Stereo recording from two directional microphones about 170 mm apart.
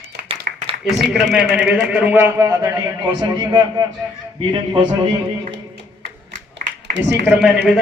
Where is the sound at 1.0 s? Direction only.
Centre (ahead or behind); by 4.9 s 30° right (ahead or behind).